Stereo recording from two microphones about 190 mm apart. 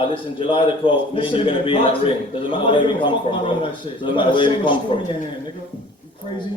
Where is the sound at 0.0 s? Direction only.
25° left (ahead or behind).